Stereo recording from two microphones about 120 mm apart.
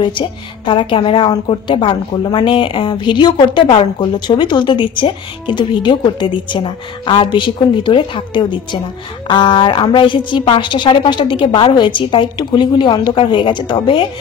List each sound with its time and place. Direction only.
0.0 s speech: 45° left (ahead or behind)